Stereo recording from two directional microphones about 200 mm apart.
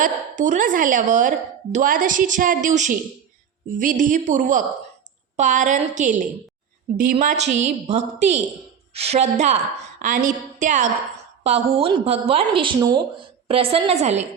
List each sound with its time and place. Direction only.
0.0 s a woman's voice: 35° right (ahead or behind)